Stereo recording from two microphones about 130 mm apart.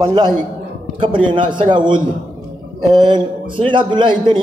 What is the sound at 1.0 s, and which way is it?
A man's voice, 40° right (ahead or behind).